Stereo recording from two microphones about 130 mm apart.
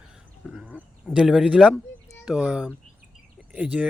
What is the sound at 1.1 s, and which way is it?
Speech, 5° right (ahead or behind).